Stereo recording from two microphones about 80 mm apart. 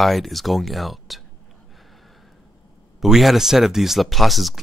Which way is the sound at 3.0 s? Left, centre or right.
Centre.